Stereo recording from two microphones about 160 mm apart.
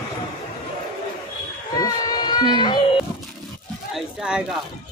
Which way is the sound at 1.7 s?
25° left (ahead or behind).